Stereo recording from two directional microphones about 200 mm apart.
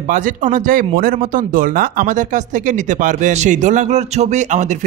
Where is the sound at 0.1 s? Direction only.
40° right (ahead or behind).